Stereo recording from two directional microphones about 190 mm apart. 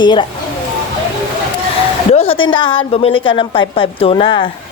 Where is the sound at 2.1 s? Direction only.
30° left (ahead or behind).